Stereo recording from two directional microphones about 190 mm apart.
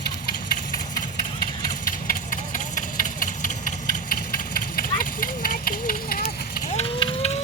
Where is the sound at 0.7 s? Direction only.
45° left (ahead or behind).